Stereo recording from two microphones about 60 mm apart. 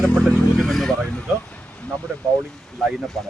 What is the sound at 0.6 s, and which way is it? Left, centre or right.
Speech, centre.